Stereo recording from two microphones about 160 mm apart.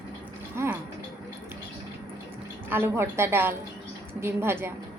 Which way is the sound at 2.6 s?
15° right (ahead or behind).